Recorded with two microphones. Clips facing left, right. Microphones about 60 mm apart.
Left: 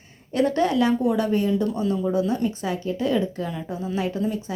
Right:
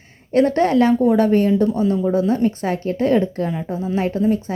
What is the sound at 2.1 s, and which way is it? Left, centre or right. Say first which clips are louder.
Speech: right 5 dB; right.